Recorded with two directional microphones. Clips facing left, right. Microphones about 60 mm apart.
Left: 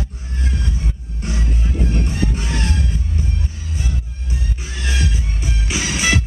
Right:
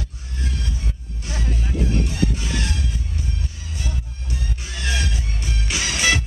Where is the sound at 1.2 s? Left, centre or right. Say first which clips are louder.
Left 3 dB; left.